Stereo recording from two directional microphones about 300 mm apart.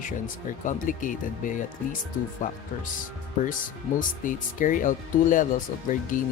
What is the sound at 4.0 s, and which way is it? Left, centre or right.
Speech, left.